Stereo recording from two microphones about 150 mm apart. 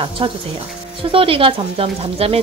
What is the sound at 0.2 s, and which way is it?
A woman's voice, 35° right (ahead or behind).